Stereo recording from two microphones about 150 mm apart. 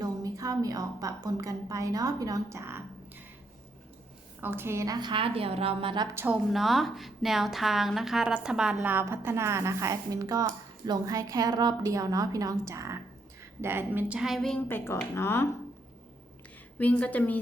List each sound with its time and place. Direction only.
0.0 s a woman's voice: 25° right (ahead or behind)
4.4 s a woman's voice: 15° right (ahead or behind); by 6.1 s 35° right (ahead or behind)
6.5 s a woman's voice: centre (ahead or behind)
14.8 s a woman's voice: 15° left (ahead or behind)
16.7 s a woman's voice: 10° left (ahead or behind)